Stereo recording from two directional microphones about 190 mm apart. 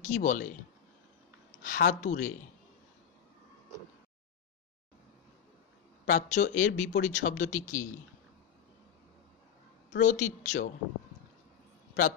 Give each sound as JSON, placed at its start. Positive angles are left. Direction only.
{"t": 0.0, "sound": "speech", "side_deg": 40}
{"t": 1.6, "sound": "a woman's voice", "side_deg": 45}
{"t": 6.0, "sound": "speech", "side_deg": 40}
{"t": 9.9, "sound": "speech", "side_deg": 40}